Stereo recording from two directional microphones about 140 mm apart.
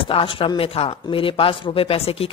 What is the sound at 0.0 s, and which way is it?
A woman's voice, 40° left (ahead or behind).